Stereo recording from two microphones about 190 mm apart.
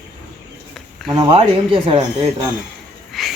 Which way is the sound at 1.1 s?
30° right (ahead or behind).